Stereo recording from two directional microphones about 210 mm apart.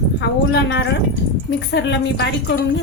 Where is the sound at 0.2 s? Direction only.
55° left (ahead or behind).